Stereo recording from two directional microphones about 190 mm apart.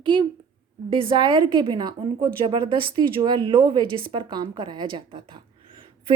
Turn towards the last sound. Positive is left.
turn(degrees=-25)  # may be behind; listen again after turning